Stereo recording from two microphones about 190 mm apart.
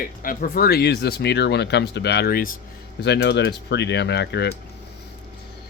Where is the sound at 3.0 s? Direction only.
65° left (ahead or behind).